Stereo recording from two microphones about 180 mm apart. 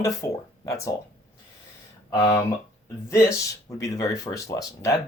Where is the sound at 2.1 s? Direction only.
20° left (ahead or behind).